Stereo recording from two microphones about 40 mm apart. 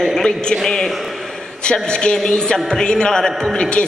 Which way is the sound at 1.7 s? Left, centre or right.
Left.